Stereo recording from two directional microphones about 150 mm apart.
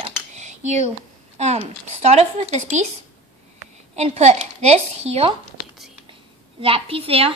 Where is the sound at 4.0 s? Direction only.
45° right (ahead or behind).